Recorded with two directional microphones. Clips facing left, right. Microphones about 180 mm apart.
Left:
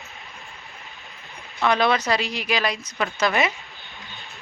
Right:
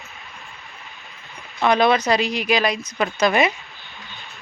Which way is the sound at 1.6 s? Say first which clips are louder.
Right 3 dB; 20° right (ahead or behind).